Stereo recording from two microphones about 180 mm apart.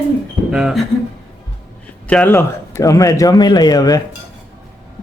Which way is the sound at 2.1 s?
10° left (ahead or behind).